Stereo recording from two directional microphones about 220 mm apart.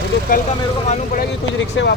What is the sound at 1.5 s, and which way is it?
Speech, 50° left (ahead or behind).